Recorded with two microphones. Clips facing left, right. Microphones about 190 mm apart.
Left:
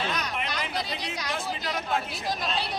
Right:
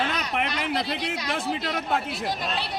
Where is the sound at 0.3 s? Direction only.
60° right (ahead or behind).